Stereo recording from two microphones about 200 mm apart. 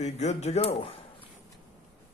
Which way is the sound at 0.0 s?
35° left (ahead or behind).